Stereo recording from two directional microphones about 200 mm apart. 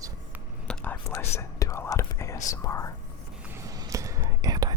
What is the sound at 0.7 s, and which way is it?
Whispering, 10° left (ahead or behind).